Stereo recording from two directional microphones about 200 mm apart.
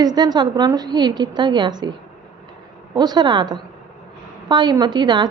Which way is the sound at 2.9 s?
20° right (ahead or behind).